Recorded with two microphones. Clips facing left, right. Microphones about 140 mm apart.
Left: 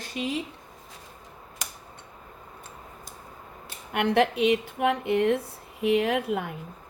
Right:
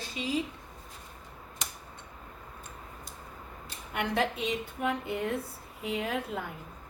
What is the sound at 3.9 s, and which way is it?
A woman's voice, 70° left (ahead or behind).